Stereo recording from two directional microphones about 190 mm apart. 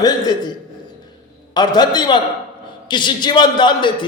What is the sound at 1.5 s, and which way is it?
A man's voice, 20° left (ahead or behind).